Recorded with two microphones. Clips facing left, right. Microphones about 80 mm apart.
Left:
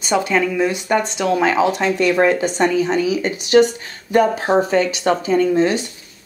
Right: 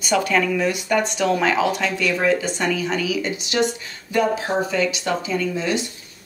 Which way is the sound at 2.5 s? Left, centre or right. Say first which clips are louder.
Left 6 dB; left.